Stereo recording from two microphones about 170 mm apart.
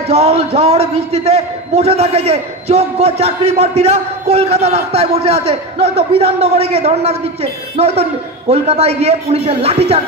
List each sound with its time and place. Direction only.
0.1 s a man's voice: 35° right (ahead or behind)